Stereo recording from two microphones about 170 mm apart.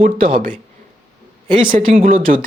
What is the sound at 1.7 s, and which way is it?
Speech, 50° right (ahead or behind).